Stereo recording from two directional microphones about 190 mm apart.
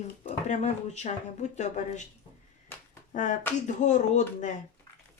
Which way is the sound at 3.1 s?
40° left (ahead or behind).